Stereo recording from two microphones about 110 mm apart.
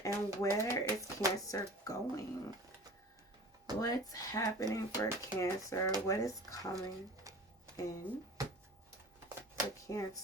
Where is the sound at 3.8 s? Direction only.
35° left (ahead or behind).